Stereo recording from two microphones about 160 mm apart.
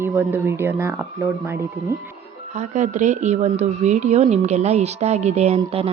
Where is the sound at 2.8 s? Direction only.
50° right (ahead or behind).